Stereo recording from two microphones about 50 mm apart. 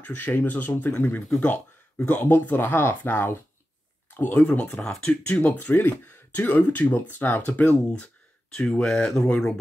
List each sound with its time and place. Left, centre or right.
0.0 s speech: left
4.2 s speech: left; by 5.1 s centre
5.2 s speech: left
8.5 s speech: centre